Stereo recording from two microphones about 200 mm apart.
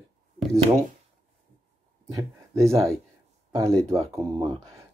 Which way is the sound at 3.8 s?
15° right (ahead or behind).